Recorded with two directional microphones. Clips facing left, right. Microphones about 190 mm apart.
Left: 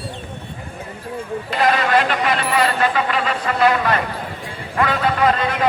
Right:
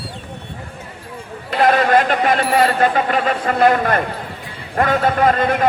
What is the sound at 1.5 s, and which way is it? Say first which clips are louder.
A man's voice: right 4 dB; 50° right (ahead or behind).